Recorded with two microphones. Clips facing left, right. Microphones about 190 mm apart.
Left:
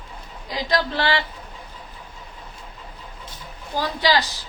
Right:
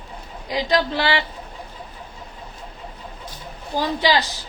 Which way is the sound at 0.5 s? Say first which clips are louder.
Right 3 dB; 15° right (ahead or behind).